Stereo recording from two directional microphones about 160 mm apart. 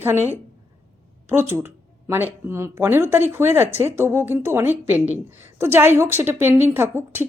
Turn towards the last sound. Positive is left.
turn(degrees=-15)  # may be behind; listen again after turning